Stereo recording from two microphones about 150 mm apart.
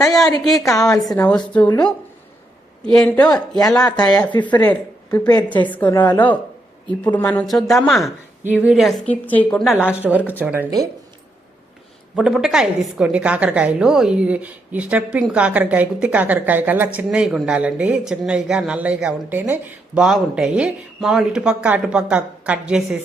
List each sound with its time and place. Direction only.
0.1 s speech: 5° left (ahead or behind)
0.6 s a woman's voice: 20° left (ahead or behind)
1.1 s a woman's voice: 10° left (ahead or behind)
2.8 s a woman's voice: 5° left (ahead or behind)
4.3 s a woman's voice: 30° left (ahead or behind)
5.6 s a woman's voice: 10° left (ahead or behind)
9.0 s a woman's voice: 10° left (ahead or behind)
9.7 s a woman's voice: 10° right (ahead or behind)
12.1 s a woman's voice: 5° right (ahead or behind)